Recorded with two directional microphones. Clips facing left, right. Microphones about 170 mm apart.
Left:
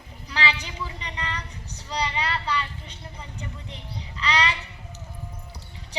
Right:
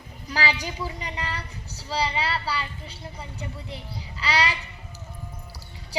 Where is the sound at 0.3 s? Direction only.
35° right (ahead or behind).